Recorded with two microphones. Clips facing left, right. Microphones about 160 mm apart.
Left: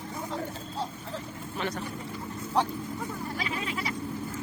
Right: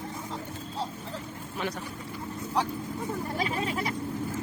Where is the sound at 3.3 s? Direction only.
40° right (ahead or behind).